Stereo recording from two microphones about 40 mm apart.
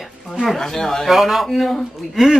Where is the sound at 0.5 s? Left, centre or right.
Centre.